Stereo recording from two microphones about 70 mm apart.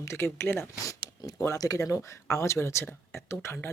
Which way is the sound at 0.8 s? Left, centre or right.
Left.